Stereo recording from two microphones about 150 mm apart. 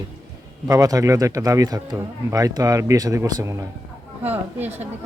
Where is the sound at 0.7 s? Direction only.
20° right (ahead or behind).